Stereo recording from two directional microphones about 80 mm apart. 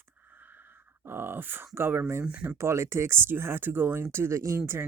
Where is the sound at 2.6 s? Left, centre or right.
Right.